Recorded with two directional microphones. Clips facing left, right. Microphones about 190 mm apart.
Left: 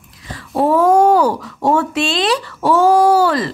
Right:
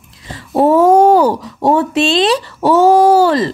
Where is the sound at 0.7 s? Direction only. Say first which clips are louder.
Right 3 dB; 20° right (ahead or behind).